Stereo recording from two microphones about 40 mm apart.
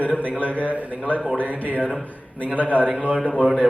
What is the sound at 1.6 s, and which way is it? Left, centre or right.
A man's voice, left.